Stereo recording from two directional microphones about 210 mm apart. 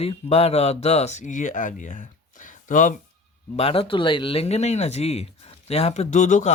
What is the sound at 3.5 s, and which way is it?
Speech, 25° left (ahead or behind).